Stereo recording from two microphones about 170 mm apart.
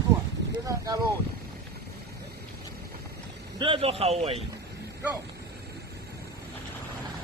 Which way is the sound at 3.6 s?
30° right (ahead or behind).